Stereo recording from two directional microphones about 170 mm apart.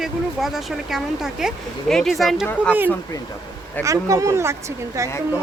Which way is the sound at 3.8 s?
20° right (ahead or behind).